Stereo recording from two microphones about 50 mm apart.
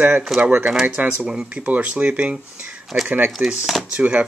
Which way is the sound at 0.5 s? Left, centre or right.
Right.